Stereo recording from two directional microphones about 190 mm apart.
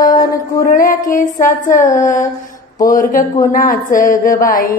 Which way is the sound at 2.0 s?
40° left (ahead or behind).